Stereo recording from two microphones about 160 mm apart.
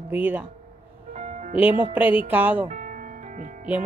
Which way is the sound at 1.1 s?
50° right (ahead or behind).